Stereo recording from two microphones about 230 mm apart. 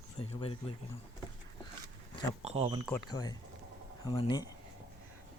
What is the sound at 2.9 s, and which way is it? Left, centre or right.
Speech, centre.